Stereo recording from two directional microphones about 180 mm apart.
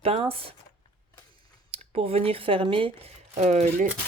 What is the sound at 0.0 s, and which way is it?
Speech, 30° right (ahead or behind).